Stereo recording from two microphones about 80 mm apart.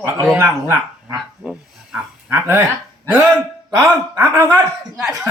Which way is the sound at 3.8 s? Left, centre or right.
Right.